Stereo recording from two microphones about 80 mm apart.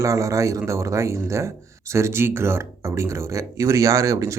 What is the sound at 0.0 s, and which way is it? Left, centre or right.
Speech, right.